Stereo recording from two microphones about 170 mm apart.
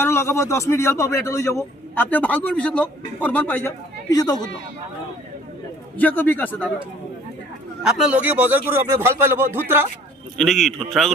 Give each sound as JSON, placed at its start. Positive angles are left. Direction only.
{"t": 0.0, "sound": "a man's voice", "side_deg": 15}
{"t": 4.1, "sound": "speech", "side_deg": 20}
{"t": 6.0, "sound": "a man's voice", "side_deg": 10}
{"t": 7.9, "sound": "a man's voice", "side_deg": -5}
{"t": 10.3, "sound": "a man's voice", "side_deg": 0}